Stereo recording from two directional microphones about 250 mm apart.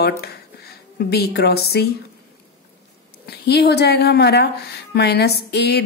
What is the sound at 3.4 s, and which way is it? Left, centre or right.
A woman's voice, left.